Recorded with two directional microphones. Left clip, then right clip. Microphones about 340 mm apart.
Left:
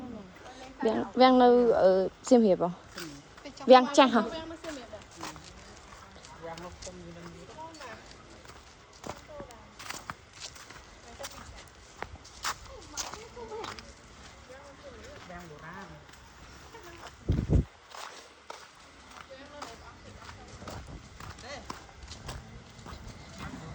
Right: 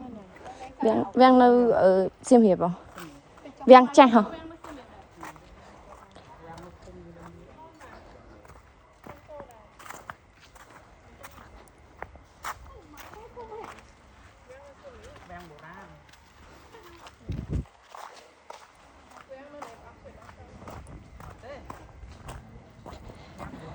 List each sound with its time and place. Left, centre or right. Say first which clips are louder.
0.8 s a sound: right 4 dB; right
3.7 s a woman's voice: right 6 dB; centre
11.9 s walk: left 1 dB; centre
17.9 s walk: even; centre